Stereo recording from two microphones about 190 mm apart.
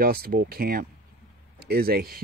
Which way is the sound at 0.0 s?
50° right (ahead or behind).